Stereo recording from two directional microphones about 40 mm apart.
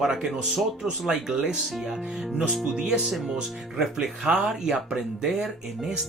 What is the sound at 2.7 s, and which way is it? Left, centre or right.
Speech, right.